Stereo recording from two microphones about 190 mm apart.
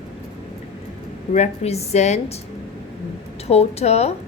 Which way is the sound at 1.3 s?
35° left (ahead or behind).